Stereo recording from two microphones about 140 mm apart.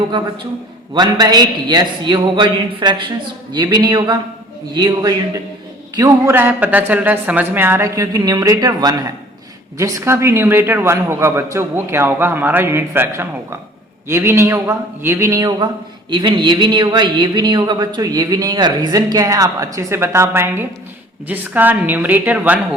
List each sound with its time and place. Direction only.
0.9 s a man's voice: 30° right (ahead or behind)
6.0 s a man's voice: 15° right (ahead or behind)